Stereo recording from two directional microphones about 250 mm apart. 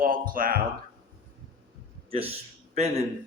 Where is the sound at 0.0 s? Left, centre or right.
Right.